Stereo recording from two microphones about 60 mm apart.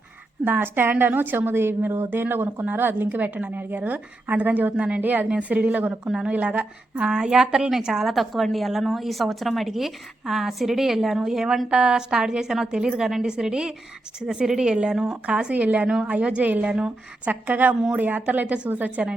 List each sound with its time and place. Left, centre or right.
0.4 s a woman's voice: right
5.9 s a woman's voice: centre
6.3 s a woman's voice: right
7.0 s a woman's voice: centre
16.7 s a woman's voice: centre
17.4 s a woman's voice: right